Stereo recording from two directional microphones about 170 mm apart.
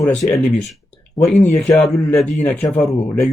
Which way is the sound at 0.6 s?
Centre (ahead or behind).